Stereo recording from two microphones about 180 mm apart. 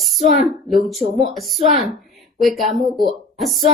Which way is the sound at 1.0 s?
35° right (ahead or behind).